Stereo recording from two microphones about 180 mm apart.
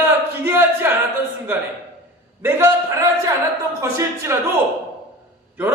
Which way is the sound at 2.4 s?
15° right (ahead or behind).